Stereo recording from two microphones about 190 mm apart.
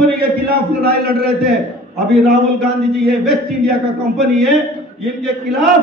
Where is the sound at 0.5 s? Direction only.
50° right (ahead or behind).